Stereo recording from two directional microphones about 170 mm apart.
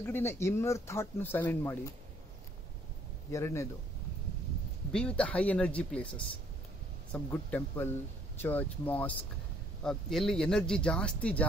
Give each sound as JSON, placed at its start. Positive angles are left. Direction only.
{"t": 0.0, "sound": "speech", "side_deg": 15}
{"t": 3.3, "sound": "speech", "side_deg": 15}
{"t": 4.9, "sound": "speech", "side_deg": 5}